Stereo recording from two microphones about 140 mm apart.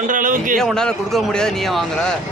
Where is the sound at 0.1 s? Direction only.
70° right (ahead or behind).